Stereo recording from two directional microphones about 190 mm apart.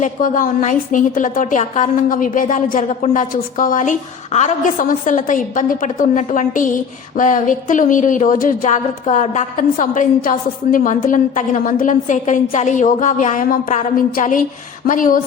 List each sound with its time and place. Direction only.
0.0 s a woman's voice: 45° left (ahead or behind)